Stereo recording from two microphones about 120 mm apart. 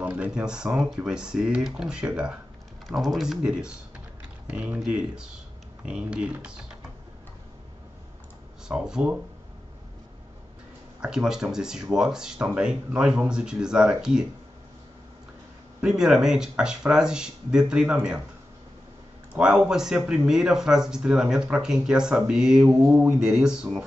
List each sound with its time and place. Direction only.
0.2 s speech: 5° right (ahead or behind)
8.6 s speech: 5° right (ahead or behind)
11.0 s speech: 5° right (ahead or behind)
15.8 s speech: 5° right (ahead or behind)
19.3 s speech: 10° right (ahead or behind)
22.8 s speech: 15° right (ahead or behind)
23.1 s speech: 5° right (ahead or behind)